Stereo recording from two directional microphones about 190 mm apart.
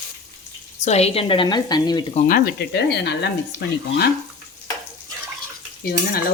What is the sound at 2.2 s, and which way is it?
Cutlery, 45° left (ahead or behind).